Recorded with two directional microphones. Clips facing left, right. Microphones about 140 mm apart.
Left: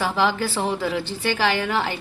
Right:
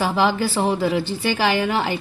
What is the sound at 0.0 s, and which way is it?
A woman's voice, 10° right (ahead or behind).